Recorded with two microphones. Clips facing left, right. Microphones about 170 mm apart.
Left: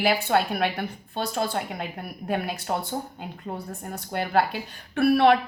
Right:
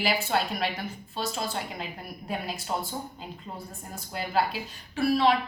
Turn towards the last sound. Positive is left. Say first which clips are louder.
# left 5 dB
turn(degrees=60)  # may be behind; listen again after turning